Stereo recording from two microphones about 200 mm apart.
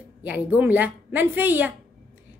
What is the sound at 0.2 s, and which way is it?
A woman's voice, 10° right (ahead or behind).